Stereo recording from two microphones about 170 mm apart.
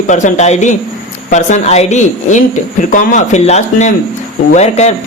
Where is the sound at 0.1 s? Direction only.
45° left (ahead or behind).